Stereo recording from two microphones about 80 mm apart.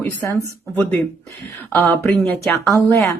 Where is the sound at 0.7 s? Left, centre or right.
Left.